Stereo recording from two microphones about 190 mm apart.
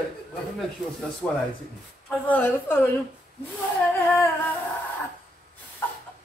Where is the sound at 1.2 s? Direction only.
5° left (ahead or behind).